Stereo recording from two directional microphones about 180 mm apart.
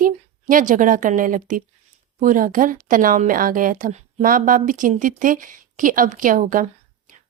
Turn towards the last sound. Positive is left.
turn(degrees=-50)  # may be behind; listen again after turning